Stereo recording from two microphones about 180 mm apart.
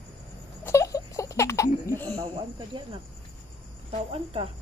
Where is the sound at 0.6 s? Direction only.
15° left (ahead or behind).